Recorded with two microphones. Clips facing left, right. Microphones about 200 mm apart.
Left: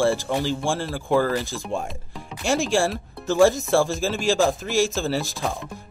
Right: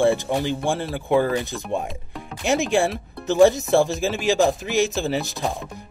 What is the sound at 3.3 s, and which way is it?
Speech, 20° right (ahead or behind).